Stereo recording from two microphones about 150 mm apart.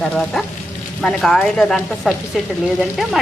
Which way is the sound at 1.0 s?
5° left (ahead or behind).